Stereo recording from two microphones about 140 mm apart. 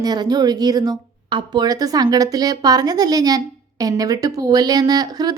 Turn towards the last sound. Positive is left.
turn(degrees=-30)  # may be behind; listen again after turning